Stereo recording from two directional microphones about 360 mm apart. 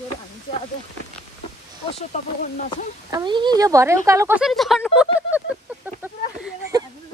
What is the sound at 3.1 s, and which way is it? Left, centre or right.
Speech, centre.